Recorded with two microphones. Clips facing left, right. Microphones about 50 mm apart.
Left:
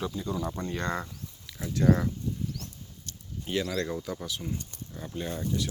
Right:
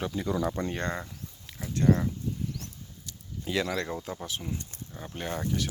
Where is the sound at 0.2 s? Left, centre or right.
Right.